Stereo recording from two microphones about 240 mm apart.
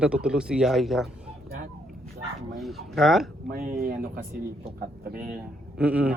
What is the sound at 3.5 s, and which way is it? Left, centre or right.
Speech, right.